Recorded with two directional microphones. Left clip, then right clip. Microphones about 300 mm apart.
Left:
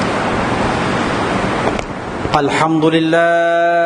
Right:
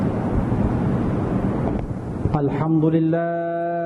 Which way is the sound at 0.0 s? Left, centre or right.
Centre.